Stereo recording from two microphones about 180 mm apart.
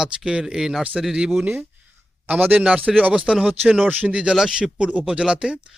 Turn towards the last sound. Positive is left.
turn(degrees=-5)  # may be behind; listen again after turning